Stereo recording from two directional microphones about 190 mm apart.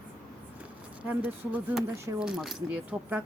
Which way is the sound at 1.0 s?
10° right (ahead or behind).